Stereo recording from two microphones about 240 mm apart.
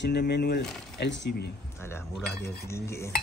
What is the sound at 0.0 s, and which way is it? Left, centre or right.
Speech, left.